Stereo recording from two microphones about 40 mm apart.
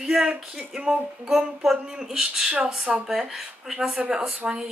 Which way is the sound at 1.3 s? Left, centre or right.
Centre.